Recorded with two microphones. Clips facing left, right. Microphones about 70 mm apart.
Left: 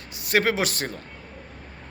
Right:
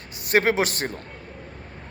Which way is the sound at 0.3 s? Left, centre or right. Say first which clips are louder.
Right 2 dB; right.